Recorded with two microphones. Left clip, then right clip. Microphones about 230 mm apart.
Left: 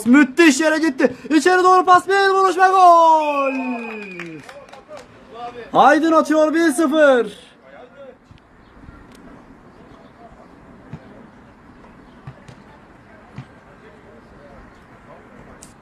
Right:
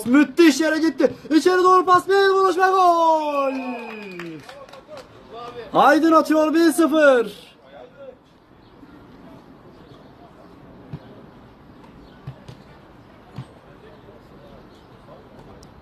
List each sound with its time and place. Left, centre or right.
0.0 s a man's voice: left
5.7 s a man's voice: left